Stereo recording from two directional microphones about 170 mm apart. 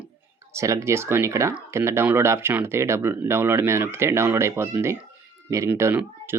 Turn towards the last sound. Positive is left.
turn(degrees=-15)  # may be behind; listen again after turning